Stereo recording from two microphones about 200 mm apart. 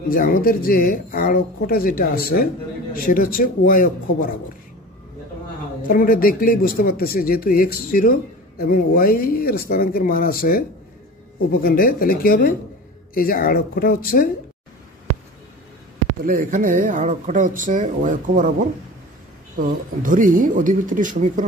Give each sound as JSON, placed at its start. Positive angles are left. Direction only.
{"t": 0.1, "sound": "speech", "side_deg": 45}
{"t": 5.9, "sound": "speech", "side_deg": 45}
{"t": 16.3, "sound": "speech", "side_deg": -45}